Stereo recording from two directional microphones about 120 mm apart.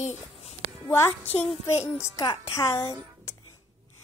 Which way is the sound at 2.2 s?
40° left (ahead or behind).